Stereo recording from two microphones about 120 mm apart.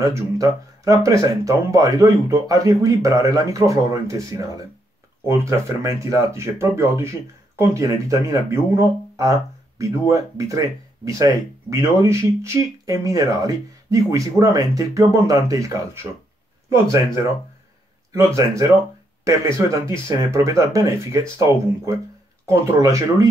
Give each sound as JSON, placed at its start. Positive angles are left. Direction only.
{"t": 0.0, "sound": "speech", "side_deg": -25}
{"t": 22.5, "sound": "speech", "side_deg": -25}